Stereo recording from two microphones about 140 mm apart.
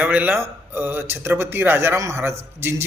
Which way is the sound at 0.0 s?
10° right (ahead or behind).